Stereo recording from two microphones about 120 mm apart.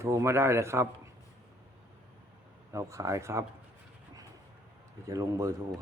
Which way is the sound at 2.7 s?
25° right (ahead or behind).